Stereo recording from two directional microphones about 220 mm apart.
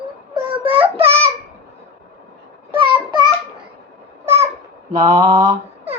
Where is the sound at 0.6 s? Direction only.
25° right (ahead or behind).